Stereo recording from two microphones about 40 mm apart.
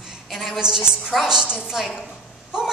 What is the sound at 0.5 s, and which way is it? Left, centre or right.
A man's voice, centre.